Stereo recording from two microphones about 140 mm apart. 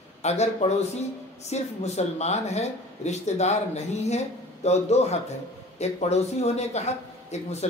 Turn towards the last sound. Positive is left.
turn(degrees=55)  # may be behind; listen again after turning